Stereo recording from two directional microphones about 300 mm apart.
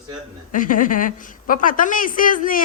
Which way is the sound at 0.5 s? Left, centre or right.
Left.